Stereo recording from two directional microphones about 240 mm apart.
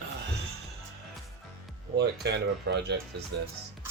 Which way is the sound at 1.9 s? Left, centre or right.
Right.